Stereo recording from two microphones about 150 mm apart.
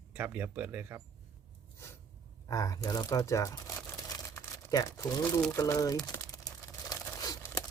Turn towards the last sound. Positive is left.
turn(degrees=25)  # may be behind; listen again after turning